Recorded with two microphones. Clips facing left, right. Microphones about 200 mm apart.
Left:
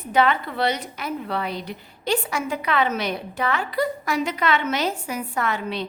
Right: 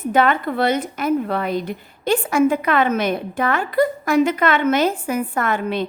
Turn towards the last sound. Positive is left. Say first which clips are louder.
# right 5 dB
turn(degrees=-50)  # may be behind; listen again after turning